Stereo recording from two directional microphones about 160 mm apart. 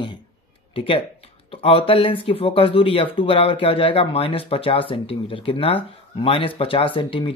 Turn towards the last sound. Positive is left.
turn(degrees=35)  # may be behind; listen again after turning